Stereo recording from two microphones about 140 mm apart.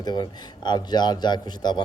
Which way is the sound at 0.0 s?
30° left (ahead or behind).